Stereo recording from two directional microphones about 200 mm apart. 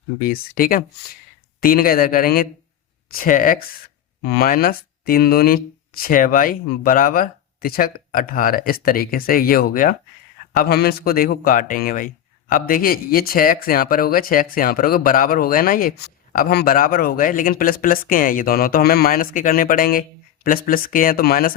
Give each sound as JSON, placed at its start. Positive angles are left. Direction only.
{"t": 0.3, "sound": "speech", "side_deg": 45}